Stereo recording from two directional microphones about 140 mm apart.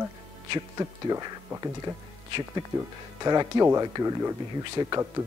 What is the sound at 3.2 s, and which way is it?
A man's voice, 25° right (ahead or behind).